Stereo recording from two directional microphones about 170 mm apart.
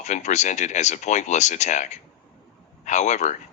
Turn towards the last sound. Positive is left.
turn(degrees=45)  # may be behind; listen again after turning